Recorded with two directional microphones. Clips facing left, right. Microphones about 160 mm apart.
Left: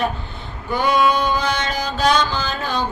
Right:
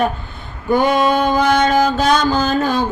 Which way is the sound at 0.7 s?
45° right (ahead or behind).